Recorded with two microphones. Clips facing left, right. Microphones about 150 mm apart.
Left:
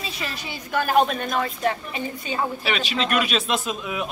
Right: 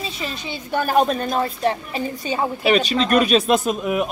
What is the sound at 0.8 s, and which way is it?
A woman's voice, 35° right (ahead or behind).